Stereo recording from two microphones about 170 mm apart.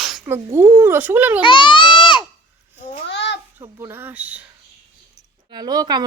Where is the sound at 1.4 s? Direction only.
30° left (ahead or behind).